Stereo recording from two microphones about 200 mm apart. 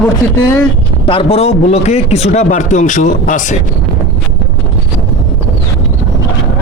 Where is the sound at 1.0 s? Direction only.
30° left (ahead or behind).